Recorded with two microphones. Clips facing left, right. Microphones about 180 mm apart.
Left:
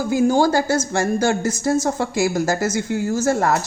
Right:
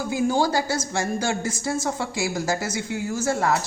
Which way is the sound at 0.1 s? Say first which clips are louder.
Left 6 dB; 45° left (ahead or behind).